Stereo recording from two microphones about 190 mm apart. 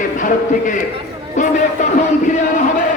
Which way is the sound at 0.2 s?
45° left (ahead or behind).